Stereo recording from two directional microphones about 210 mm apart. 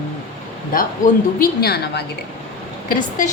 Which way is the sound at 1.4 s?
50° left (ahead or behind).